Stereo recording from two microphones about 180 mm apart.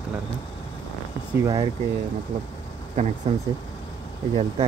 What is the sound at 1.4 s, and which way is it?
Speech, 20° right (ahead or behind).